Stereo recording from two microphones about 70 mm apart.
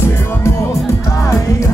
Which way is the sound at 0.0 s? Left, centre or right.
Left.